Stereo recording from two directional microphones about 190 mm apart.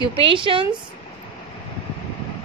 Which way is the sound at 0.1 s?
25° right (ahead or behind).